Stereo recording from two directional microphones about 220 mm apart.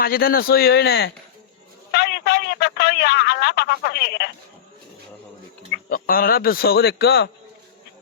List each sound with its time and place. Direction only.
0.0 s a man's voice: 40° left (ahead or behind)
5.7 s speech: 40° left (ahead or behind)